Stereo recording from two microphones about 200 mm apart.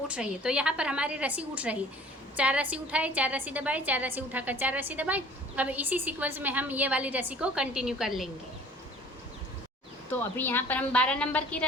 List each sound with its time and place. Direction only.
0.1 s a woman's voice: 5° right (ahead or behind)
10.1 s a woman's voice: 10° left (ahead or behind)